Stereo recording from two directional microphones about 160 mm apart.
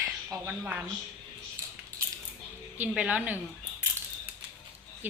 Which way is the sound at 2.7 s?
10° right (ahead or behind).